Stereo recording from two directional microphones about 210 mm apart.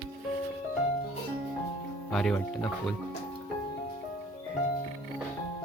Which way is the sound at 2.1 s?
5° left (ahead or behind).